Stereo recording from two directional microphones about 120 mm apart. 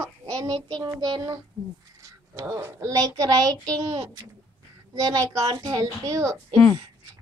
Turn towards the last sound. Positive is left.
turn(degrees=20)  # may be behind; listen again after turning